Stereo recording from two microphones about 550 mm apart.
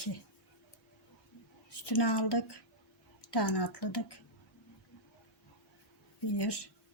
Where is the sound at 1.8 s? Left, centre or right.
Left.